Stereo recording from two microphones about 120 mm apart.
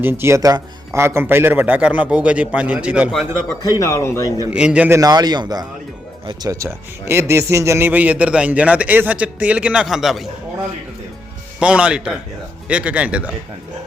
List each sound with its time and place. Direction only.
0.0 s a man's voice: 20° right (ahead or behind)
3.6 s speech: 30° left (ahead or behind)
4.5 s a man's voice: 10° right (ahead or behind)
4.9 s speech: 30° right (ahead or behind)
6.7 s a man's voice: 20° right (ahead or behind); by 10.2 s centre (ahead or behind)
11.6 s a man's voice: 10° right (ahead or behind)